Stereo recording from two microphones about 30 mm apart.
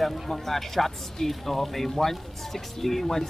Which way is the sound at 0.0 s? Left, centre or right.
Centre.